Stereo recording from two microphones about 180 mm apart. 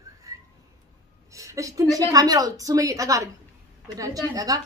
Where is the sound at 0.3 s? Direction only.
15° right (ahead or behind).